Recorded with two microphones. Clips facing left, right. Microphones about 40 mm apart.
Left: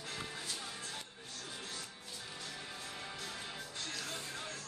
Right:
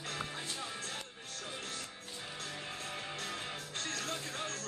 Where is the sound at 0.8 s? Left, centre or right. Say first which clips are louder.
Right 3 dB; right.